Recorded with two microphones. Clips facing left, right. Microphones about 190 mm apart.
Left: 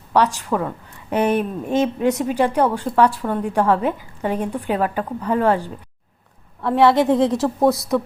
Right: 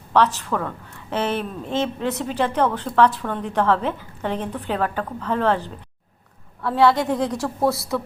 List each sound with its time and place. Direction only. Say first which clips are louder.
0.1 s a woman's voice: left 1 dB; 10° left (ahead or behind)